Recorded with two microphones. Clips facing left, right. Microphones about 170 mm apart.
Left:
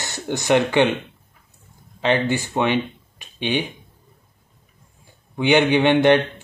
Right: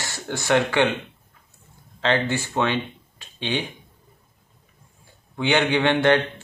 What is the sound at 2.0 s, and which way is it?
Speech, 15° left (ahead or behind).